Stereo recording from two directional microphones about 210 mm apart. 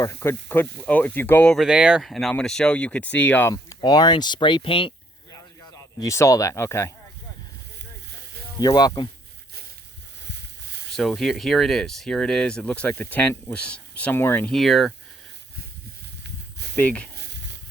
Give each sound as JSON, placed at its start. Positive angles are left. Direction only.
{"t": 0.0, "sound": "speech", "side_deg": 15}
{"t": 8.1, "sound": "snake", "side_deg": -50}
{"t": 8.5, "sound": "speech", "side_deg": 20}
{"t": 10.2, "sound": "a sound", "side_deg": -55}
{"t": 10.9, "sound": "speech", "side_deg": 0}
{"t": 16.2, "sound": "snake", "side_deg": -55}
{"t": 16.7, "sound": "speech", "side_deg": 5}
{"t": 17.2, "sound": "a sound", "side_deg": -55}